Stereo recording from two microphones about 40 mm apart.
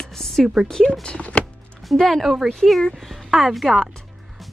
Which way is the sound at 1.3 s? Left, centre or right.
Left.